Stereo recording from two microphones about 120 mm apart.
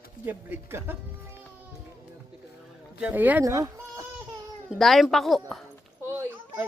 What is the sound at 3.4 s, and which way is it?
Speech, 25° right (ahead or behind).